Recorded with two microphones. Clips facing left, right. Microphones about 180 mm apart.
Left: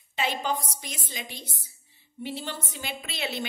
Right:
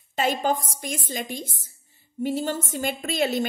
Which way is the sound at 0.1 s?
45° right (ahead or behind).